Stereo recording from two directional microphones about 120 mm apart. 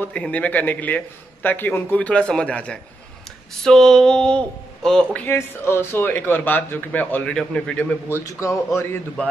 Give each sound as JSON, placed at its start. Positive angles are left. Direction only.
{"t": 0.0, "sound": "a man's voice", "side_deg": 10}
{"t": 5.2, "sound": "a man's voice", "side_deg": 20}
{"t": 8.1, "sound": "a man's voice", "side_deg": 25}